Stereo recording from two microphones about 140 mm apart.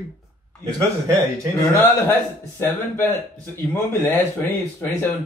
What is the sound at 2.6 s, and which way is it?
Speech, 15° left (ahead or behind).